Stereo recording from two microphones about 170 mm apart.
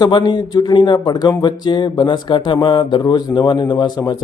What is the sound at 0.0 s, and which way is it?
Speech, 25° left (ahead or behind).